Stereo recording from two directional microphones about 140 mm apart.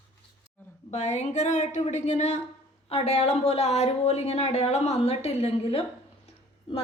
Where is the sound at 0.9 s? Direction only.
55° left (ahead or behind).